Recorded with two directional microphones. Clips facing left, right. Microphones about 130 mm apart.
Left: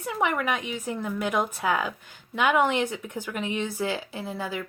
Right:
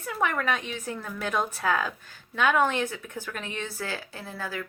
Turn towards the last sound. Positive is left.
turn(degrees=20)  # may be behind; listen again after turning